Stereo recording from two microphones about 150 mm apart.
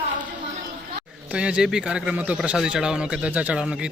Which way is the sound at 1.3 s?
5° right (ahead or behind).